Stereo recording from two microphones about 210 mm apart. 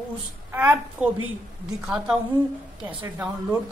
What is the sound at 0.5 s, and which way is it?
A woman's voice, 10° right (ahead or behind).